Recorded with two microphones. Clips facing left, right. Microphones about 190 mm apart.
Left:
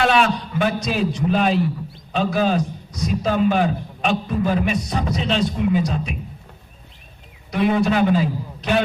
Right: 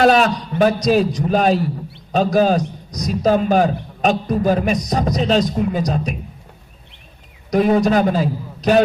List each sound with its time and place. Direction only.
0.0 s a man's voice: 40° right (ahead or behind)
7.5 s a man's voice: 40° right (ahead or behind)